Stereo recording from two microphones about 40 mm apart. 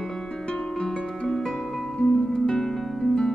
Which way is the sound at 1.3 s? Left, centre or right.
Centre.